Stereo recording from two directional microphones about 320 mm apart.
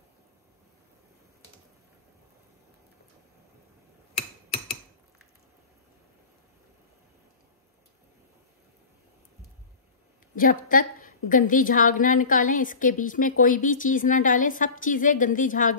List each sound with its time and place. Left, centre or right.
10.3 s a woman's voice: left